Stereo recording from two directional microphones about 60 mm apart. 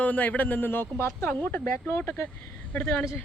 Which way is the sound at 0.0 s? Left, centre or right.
Left.